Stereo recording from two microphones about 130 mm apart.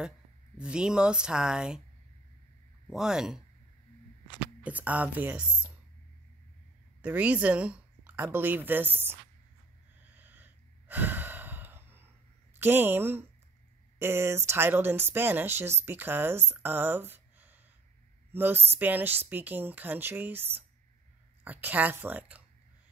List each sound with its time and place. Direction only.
0.6 s speech: 5° right (ahead or behind)
2.9 s speech: 5° right (ahead or behind)
4.6 s speech: 10° right (ahead or behind)
7.0 s speech: 10° right (ahead or behind)
10.1 s breathing: 15° right (ahead or behind)
12.5 s speech: 15° right (ahead or behind)